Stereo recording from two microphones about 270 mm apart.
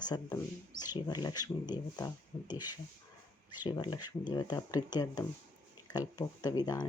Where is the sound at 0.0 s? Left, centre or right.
Centre.